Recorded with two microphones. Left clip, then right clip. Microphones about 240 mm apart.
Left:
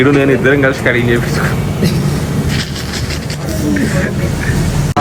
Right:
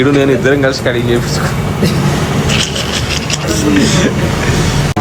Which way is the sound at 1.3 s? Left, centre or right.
Centre.